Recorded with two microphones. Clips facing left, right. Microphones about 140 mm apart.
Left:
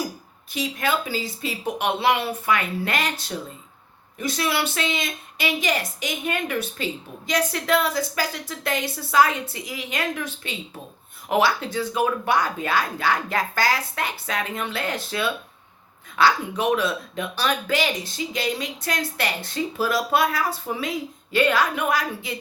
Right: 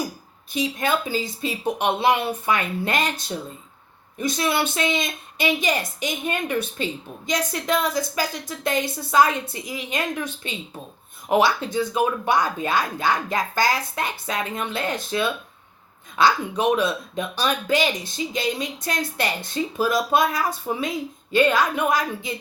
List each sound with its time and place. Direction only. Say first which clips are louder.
0.5 s speech: right 2 dB; 20° right (ahead or behind)